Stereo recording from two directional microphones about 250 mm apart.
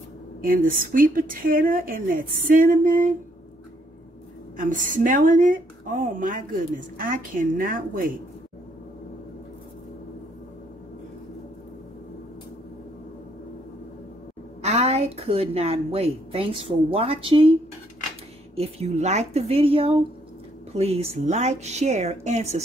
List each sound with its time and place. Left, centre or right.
0.4 s a woman's voice: right
4.6 s a woman's voice: right
14.6 s a woman's voice: right
18.6 s a woman's voice: right